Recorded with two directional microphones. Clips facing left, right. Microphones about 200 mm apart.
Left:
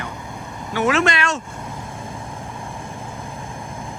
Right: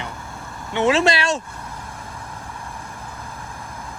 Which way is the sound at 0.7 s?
25° right (ahead or behind).